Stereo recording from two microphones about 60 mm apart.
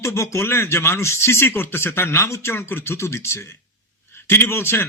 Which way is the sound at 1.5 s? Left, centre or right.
Left.